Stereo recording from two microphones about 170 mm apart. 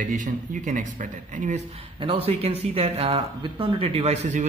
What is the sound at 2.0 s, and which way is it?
Speech, 35° right (ahead or behind).